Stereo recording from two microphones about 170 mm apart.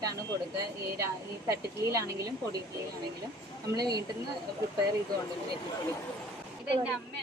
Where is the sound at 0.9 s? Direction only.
20° right (ahead or behind).